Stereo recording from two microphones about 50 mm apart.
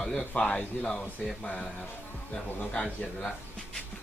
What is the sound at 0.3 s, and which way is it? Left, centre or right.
A man's voice, left.